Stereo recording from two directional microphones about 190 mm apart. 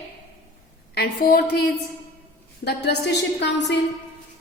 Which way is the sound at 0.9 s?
60° left (ahead or behind).